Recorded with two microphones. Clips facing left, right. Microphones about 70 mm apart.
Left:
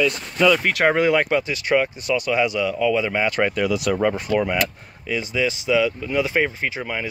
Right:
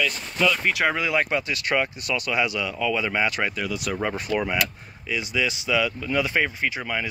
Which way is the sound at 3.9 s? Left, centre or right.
Centre.